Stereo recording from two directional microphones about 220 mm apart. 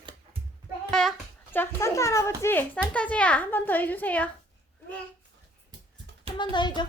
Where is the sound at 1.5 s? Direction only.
15° left (ahead or behind).